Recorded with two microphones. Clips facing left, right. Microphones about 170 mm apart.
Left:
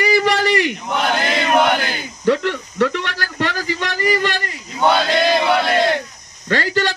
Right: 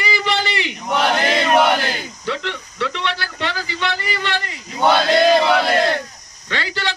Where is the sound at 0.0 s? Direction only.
50° left (ahead or behind).